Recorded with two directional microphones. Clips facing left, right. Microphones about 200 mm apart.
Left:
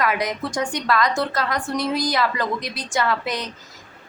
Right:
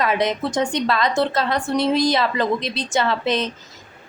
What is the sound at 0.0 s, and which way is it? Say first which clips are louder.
A woman's voice: right 3 dB; 25° right (ahead or behind).